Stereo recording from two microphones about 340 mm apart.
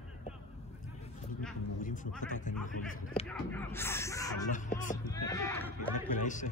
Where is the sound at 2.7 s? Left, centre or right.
Left.